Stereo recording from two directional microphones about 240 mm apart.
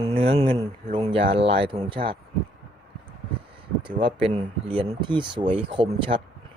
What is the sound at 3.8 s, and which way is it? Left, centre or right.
Speech, right.